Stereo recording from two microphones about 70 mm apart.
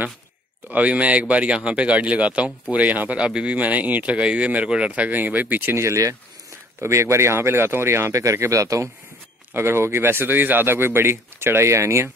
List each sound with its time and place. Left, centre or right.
0.7 s speech: centre
5.8 s speech: right
9.5 s speech: right